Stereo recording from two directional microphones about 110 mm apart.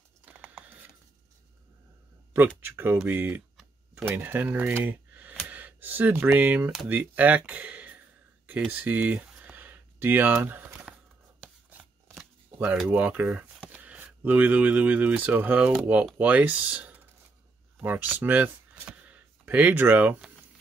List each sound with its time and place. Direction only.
0.2 s computer keyboard: 15° right (ahead or behind)
2.3 s speech: 20° right (ahead or behind)
8.5 s a sound: 15° right (ahead or behind)
11.7 s shuffling cards: 10° right (ahead or behind)
12.8 s speech: 15° right (ahead or behind)